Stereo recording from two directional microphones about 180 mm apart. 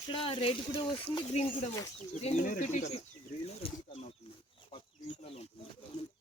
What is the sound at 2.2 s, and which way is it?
Speech, 45° left (ahead or behind).